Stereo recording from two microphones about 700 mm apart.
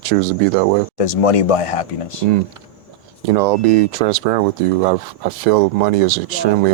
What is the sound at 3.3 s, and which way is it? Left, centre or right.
Speech, right.